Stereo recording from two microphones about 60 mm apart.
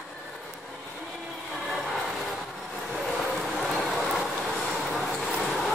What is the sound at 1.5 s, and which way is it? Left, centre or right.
Vehicle, centre.